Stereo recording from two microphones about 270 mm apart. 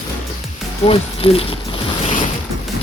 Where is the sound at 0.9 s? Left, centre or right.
Left.